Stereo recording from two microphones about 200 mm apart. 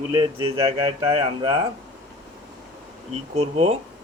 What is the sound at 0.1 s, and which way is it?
Speech, 25° right (ahead or behind).